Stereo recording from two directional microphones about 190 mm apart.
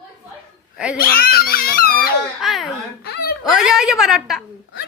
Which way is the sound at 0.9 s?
50° left (ahead or behind).